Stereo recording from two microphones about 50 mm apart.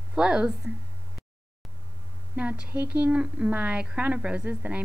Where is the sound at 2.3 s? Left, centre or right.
Right.